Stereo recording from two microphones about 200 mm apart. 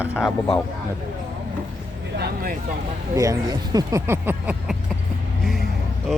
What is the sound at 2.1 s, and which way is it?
Speech, 50° right (ahead or behind).